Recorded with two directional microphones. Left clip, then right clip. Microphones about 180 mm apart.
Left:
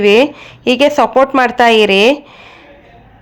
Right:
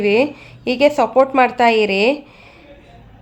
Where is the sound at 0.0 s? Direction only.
20° left (ahead or behind).